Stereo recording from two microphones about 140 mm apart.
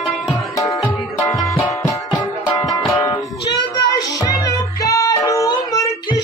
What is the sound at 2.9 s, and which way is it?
Music, 25° left (ahead or behind).